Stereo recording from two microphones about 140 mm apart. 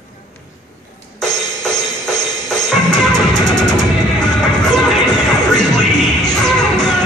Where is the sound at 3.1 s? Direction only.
30° left (ahead or behind).